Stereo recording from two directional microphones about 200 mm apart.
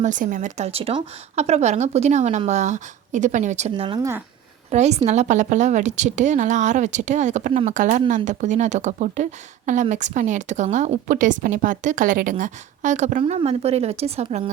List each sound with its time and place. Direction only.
0.0 s a woman's voice: 40° right (ahead or behind)
3.8 s speech: 20° right (ahead or behind)
4.7 s a woman's voice: 35° right (ahead or behind)